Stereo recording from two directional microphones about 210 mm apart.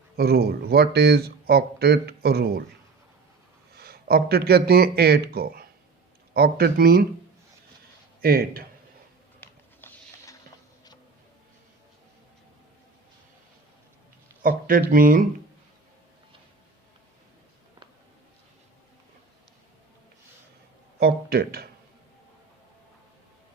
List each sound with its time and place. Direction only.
0.2 s speech: 50° right (ahead or behind)
3.8 s speech: 45° right (ahead or behind)
8.2 s speech: 45° right (ahead or behind)
9.4 s a sound: 10° left (ahead or behind)
14.4 s speech: 40° right (ahead or behind)
21.0 s speech: 45° right (ahead or behind)